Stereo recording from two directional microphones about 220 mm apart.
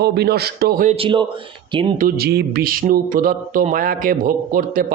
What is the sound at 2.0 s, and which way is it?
Speech, 45° right (ahead or behind).